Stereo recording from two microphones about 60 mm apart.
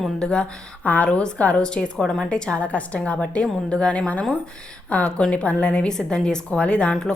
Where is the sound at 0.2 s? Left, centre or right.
Centre.